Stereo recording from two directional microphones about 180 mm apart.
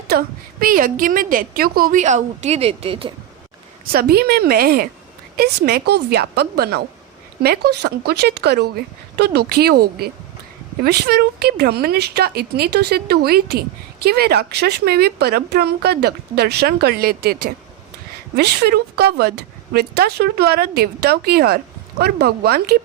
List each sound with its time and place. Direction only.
0.1 s a woman's voice: 60° right (ahead or behind); by 3.1 s 30° right (ahead or behind)
3.9 s speech: 60° right (ahead or behind)